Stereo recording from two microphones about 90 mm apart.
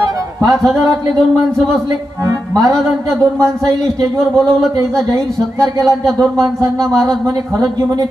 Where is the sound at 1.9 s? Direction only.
45° right (ahead or behind).